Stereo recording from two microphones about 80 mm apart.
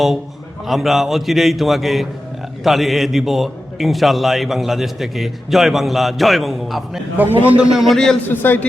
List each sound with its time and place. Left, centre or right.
0.7 s a man's voice: centre
7.9 s a man's voice: centre
8.3 s a man's voice: left